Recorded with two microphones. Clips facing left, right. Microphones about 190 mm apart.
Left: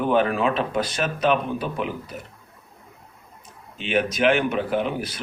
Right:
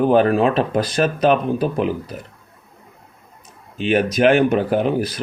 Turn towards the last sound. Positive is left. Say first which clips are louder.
# right 6 dB
turn(degrees=-40)  # may be behind; listen again after turning